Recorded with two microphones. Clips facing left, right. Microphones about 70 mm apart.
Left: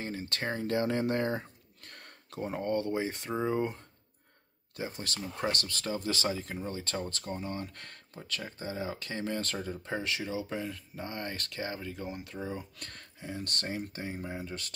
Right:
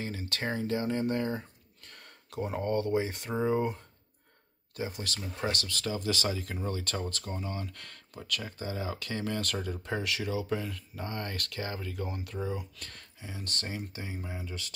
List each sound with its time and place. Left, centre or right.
0.0 s speech: left
0.7 s speech: left
2.6 s speech: right
3.3 s speech: centre
4.7 s speech: left
12.5 s speech: left